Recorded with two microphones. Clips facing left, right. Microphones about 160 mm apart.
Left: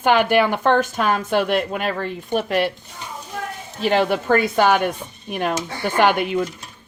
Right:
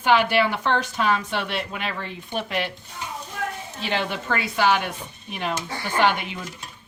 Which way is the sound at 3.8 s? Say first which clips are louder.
Left 9 dB; 45° left (ahead or behind).